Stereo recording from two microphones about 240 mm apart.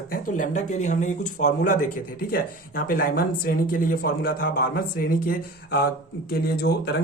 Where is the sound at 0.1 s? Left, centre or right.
Left.